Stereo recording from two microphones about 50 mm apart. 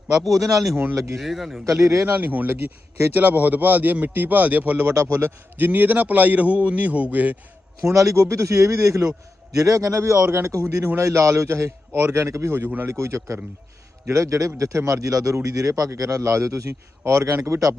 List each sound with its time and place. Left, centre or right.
0.1 s a man's voice: centre
1.6 s a man's voice: right
2.0 s a man's voice: right
7.8 s a man's voice: right
9.5 s a man's voice: right
10.9 s a man's voice: right
12.9 s a man's voice: right
14.1 s a man's voice: right
17.1 s a man's voice: right
17.3 s a man's voice: right